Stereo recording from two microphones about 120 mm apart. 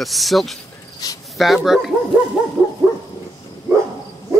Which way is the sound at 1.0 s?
30° left (ahead or behind).